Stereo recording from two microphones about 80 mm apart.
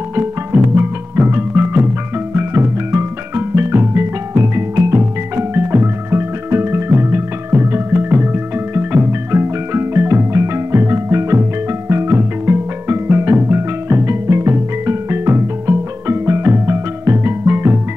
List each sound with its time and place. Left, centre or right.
0.1 s music: right